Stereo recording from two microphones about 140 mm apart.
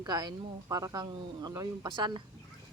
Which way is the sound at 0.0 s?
30° right (ahead or behind).